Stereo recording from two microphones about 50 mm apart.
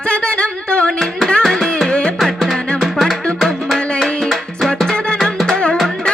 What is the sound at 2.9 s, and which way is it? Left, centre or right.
Music, centre.